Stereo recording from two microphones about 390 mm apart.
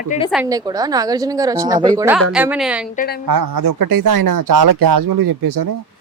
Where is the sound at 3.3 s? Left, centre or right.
Right.